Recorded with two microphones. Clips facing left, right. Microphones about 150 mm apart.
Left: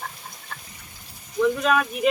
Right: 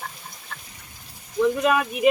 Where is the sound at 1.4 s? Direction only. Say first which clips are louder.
Right 1 dB; 15° right (ahead or behind).